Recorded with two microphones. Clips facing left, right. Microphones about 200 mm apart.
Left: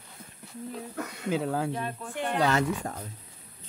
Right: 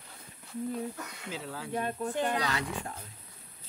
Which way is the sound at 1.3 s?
55° left (ahead or behind).